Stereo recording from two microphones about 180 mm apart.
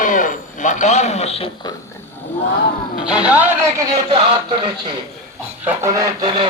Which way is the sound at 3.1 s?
5° right (ahead or behind).